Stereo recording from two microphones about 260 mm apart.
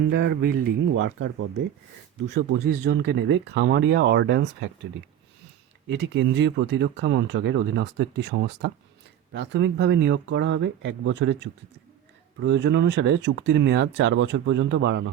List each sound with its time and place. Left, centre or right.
0.1 s speech: right
5.9 s speech: right